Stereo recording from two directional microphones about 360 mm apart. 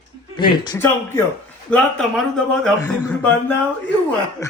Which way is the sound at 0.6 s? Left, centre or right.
Centre.